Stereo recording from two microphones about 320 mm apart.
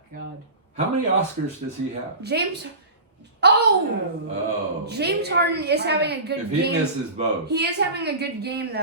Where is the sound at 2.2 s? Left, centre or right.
Right.